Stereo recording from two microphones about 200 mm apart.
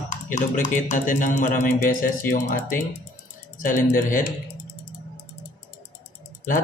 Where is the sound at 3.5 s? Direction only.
40° left (ahead or behind).